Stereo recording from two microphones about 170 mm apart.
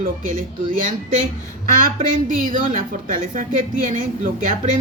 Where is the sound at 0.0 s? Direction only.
55° right (ahead or behind).